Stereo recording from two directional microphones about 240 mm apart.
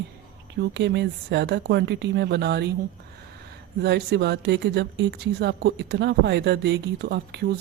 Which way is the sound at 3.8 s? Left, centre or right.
Right.